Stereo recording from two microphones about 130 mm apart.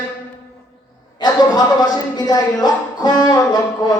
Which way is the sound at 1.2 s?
30° left (ahead or behind).